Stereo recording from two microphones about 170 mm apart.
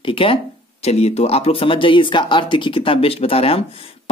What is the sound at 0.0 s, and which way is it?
Speech, 30° left (ahead or behind).